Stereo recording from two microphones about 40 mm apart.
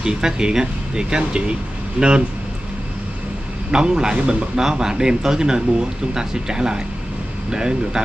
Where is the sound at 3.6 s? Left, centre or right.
Centre.